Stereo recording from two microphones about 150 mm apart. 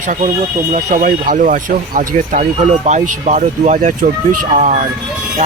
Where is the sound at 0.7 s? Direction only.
55° right (ahead or behind).